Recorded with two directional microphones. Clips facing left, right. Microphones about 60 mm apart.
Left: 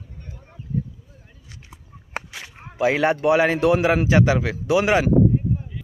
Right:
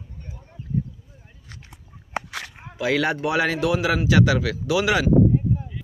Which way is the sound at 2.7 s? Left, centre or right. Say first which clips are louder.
Left 3 dB; left.